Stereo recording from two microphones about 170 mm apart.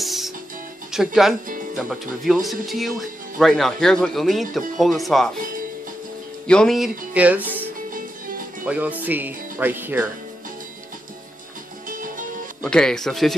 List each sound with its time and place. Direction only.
0.0 s music: centre (ahead or behind)
0.9 s speech: centre (ahead or behind)
1.5 s music: 50° right (ahead or behind)
1.8 s speech: centre (ahead or behind)
6.4 s speech: 5° left (ahead or behind)
8.6 s speech: 10° right (ahead or behind)
11.9 s music: 50° right (ahead or behind)
12.6 s speech: 5° left (ahead or behind)